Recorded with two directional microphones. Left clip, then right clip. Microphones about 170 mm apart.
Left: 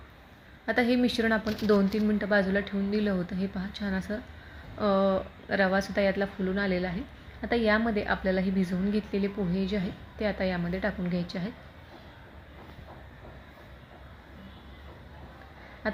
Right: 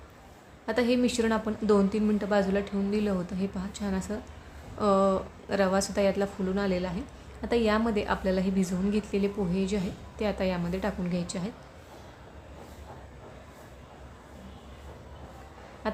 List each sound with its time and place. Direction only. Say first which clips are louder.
0.6 s a woman's voice: even; 5° right (ahead or behind)